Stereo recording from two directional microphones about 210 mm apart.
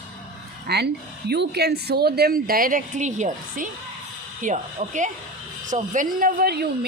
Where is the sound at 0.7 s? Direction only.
50° right (ahead or behind).